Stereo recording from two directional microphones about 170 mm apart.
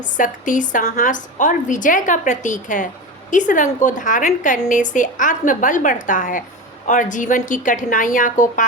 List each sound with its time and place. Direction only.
0.2 s a woman's voice: 50° left (ahead or behind)